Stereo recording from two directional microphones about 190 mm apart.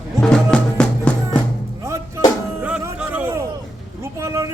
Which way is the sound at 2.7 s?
5° right (ahead or behind).